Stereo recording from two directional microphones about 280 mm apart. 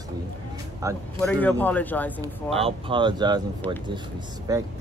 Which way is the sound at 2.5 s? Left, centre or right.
Centre.